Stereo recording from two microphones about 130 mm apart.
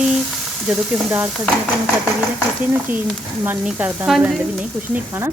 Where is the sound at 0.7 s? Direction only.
10° right (ahead or behind).